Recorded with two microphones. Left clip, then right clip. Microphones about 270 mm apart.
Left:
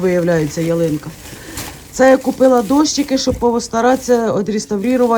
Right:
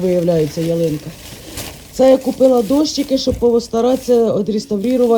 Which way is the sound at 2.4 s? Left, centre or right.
Centre.